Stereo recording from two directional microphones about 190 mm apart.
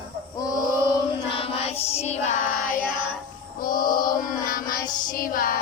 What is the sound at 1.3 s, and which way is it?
Child singing, 30° left (ahead or behind).